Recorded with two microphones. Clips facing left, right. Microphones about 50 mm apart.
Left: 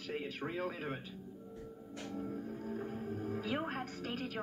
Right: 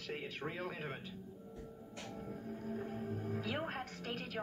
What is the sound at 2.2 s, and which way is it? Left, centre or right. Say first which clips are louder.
Music: left 5 dB; centre.